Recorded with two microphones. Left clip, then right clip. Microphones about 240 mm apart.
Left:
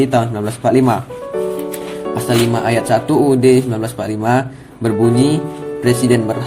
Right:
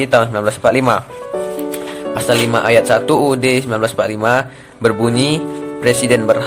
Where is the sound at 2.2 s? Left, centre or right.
Centre.